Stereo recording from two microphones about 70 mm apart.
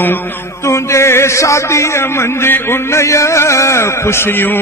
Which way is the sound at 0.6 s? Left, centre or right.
Left.